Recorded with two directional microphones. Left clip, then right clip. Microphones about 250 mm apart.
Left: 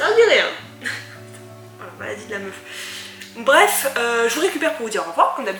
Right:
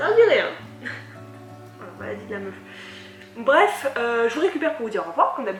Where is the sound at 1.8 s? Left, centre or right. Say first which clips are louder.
Left 3 dB; centre.